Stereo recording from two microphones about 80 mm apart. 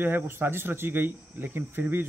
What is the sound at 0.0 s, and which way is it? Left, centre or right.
Speech, right.